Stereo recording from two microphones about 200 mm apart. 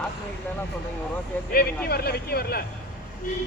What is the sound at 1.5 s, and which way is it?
Speech, 50° left (ahead or behind).